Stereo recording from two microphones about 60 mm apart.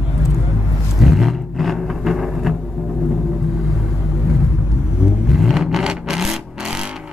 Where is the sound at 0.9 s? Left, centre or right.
Centre.